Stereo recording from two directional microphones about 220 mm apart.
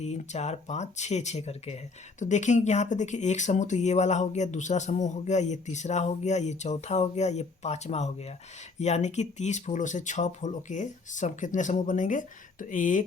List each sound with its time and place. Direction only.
0.0 s speech: 30° left (ahead or behind)